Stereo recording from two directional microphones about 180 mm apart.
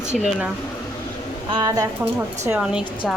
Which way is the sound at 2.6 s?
5° right (ahead or behind).